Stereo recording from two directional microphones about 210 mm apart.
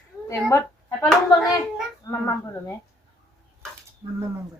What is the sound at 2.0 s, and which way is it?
Speech, 15° left (ahead or behind).